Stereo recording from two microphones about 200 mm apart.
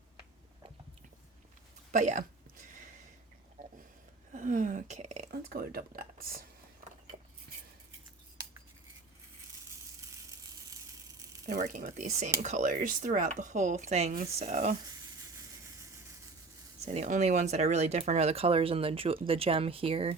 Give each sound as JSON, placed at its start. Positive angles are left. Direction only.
{"t": 1.9, "sound": "speech", "side_deg": -40}
{"t": 2.6, "sound": "a sound", "side_deg": -40}
{"t": 4.3, "sound": "speech", "side_deg": -40}
{"t": 5.3, "sound": "speech", "side_deg": -45}
{"t": 11.6, "sound": "speech", "side_deg": -40}
{"t": 16.8, "sound": "speech", "side_deg": -35}